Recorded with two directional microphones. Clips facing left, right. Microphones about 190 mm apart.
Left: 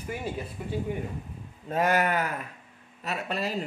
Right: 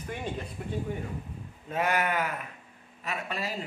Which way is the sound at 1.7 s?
40° left (ahead or behind).